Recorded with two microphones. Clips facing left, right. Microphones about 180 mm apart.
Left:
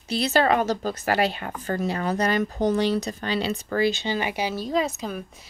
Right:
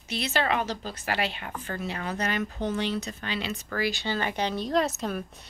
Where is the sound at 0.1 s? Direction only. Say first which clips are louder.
Left 6 dB; 35° left (ahead or behind).